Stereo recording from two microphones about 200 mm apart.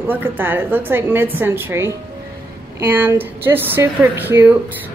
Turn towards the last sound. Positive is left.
turn(degrees=-10)  # may be behind; listen again after turning